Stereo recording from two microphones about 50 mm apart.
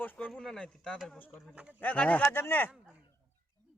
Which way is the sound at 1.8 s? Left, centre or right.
Left.